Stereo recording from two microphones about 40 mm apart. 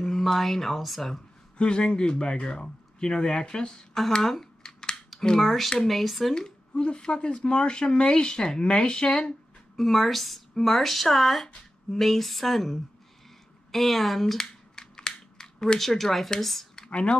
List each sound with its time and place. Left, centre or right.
0.0 s speech: centre
1.6 s speech: left
4.1 s scissors: centre
5.4 s speech: centre
6.7 s speech: left
9.8 s speech: centre
14.3 s scissors: centre
15.8 s speech: centre
16.7 s a sound: centre